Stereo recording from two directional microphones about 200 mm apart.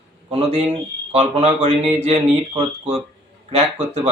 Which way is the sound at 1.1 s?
30° right (ahead or behind).